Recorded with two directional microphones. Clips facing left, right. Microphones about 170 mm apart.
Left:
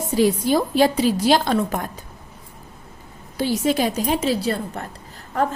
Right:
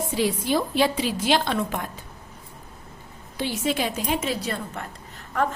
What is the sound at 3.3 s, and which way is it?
A woman's voice, 40° left (ahead or behind).